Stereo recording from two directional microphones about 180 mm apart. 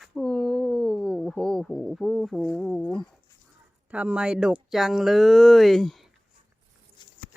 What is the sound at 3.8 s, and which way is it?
Speech, 5° right (ahead or behind).